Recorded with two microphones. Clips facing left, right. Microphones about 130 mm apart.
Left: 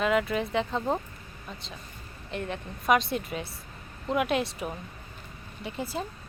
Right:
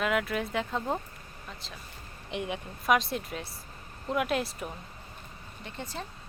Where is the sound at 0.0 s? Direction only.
Centre (ahead or behind).